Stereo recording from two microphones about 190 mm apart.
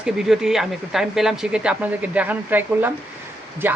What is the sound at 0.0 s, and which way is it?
A woman's voice, centre (ahead or behind).